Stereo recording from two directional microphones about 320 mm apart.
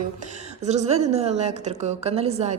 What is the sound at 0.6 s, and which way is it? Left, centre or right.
A woman's voice, right.